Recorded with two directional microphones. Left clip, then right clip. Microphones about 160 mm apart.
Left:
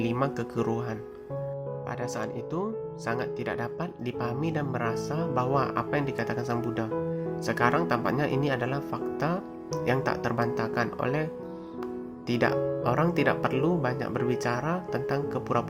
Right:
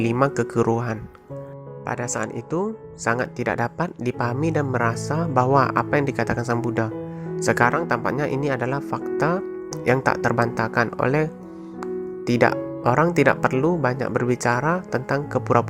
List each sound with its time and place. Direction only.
0.0 s speech: 45° right (ahead or behind)